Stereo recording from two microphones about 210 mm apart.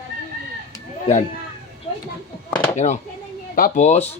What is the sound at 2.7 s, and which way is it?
Speech, 35° left (ahead or behind).